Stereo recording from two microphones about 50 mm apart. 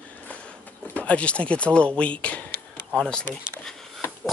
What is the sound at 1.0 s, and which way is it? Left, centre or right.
Speech, left.